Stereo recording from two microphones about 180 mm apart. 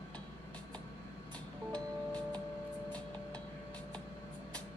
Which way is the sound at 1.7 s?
5° left (ahead or behind).